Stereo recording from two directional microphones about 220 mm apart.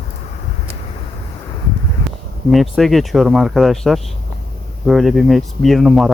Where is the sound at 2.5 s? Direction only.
Centre (ahead or behind).